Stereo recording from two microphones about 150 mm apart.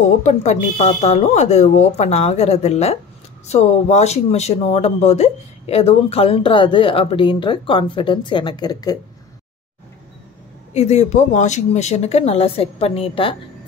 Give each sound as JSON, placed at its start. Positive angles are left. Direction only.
{"t": 0.2, "sound": "speech", "side_deg": 50}
{"t": 10.7, "sound": "speech", "side_deg": 45}